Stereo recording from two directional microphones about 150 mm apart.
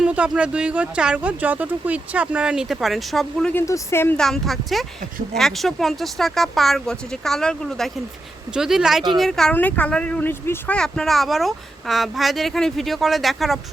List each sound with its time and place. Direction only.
0.0 s speech: 10° right (ahead or behind)
3.5 s speech: 20° left (ahead or behind)
4.2 s speech: centre (ahead or behind)
10.8 s speech: 5° left (ahead or behind)